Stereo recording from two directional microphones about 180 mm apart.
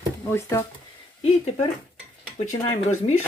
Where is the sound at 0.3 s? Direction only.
15° left (ahead or behind).